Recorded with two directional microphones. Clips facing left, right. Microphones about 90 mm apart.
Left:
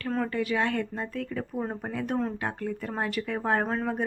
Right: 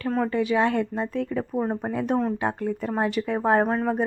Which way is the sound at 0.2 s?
20° right (ahead or behind).